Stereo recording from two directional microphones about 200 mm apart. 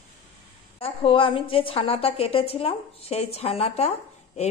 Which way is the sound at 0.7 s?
25° left (ahead or behind).